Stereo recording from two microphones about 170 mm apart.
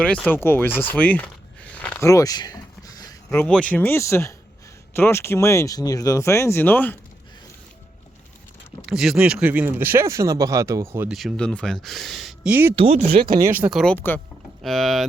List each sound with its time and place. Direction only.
0.0 s speech: 5° left (ahead or behind)
1.7 s a sound: 10° left (ahead or behind)
2.0 s a sound: 20° left (ahead or behind)
3.2 s speech: 5° left (ahead or behind)
8.9 s speech: 5° right (ahead or behind)
11.1 s speech: centre (ahead or behind)
12.7 s speech: 35° right (ahead or behind)
13.4 s speech: 10° right (ahead or behind)
13.9 s speech: 10° left (ahead or behind)